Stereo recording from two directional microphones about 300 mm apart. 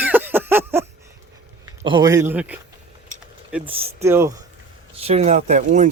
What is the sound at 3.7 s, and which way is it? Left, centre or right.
Speech, centre.